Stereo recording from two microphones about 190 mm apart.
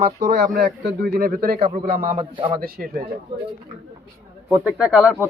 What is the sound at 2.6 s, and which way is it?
Speech, 50° right (ahead or behind).